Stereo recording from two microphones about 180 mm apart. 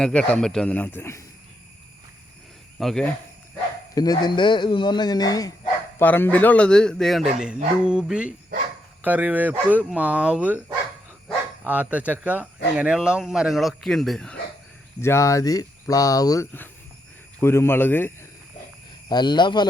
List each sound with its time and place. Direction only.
0.0 s speech: 5° left (ahead or behind)
2.7 s speech: centre (ahead or behind)
3.9 s speech: 20° left (ahead or behind); by 10.6 s 5° right (ahead or behind)
11.6 s speech: 10° right (ahead or behind)
15.0 s speech: 15° left (ahead or behind)
19.0 s speech: 25° left (ahead or behind)